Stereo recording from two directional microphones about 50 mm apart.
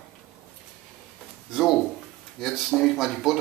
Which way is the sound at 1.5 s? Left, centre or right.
Centre.